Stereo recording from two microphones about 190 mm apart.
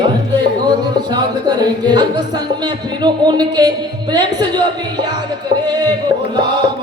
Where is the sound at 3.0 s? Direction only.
20° right (ahead or behind).